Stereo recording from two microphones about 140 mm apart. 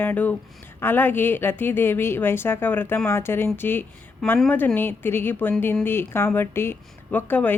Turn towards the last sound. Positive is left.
turn(degrees=15)  # may be behind; listen again after turning